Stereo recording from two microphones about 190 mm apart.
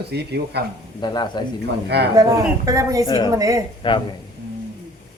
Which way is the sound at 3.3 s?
20° right (ahead or behind).